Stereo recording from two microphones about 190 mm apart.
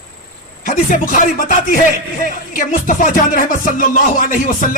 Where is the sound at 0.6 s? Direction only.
45° left (ahead or behind).